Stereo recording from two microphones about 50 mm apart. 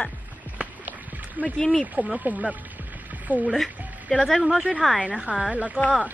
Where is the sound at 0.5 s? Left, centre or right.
Right.